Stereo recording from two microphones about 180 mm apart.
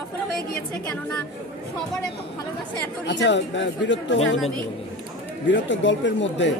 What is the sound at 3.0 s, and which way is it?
Speech, 80° left.